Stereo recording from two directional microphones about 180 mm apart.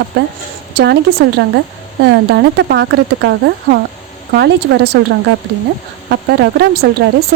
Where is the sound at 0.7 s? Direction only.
65° right (ahead or behind).